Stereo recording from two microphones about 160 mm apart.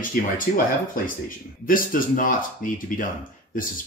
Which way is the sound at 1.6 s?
60° left (ahead or behind).